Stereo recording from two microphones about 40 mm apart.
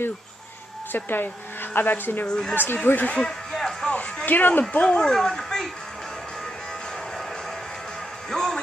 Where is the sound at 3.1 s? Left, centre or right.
Centre.